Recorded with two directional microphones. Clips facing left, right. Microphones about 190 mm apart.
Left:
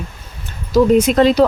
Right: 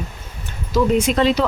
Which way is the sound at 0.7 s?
40° left (ahead or behind).